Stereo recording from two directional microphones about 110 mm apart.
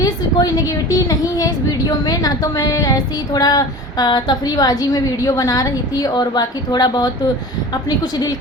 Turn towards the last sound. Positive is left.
turn(degrees=40)  # may be behind; listen again after turning